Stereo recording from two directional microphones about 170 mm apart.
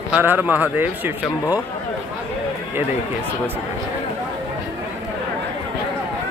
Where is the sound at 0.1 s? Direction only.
10° right (ahead or behind).